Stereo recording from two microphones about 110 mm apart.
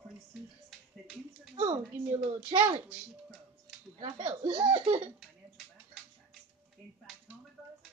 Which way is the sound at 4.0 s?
60° right (ahead or behind).